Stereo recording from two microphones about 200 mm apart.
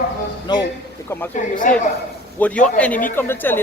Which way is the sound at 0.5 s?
20° left (ahead or behind).